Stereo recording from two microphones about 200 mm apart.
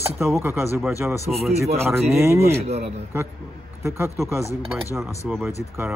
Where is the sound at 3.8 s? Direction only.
10° right (ahead or behind).